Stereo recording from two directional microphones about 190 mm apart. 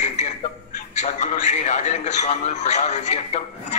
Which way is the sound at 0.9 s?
40° left (ahead or behind).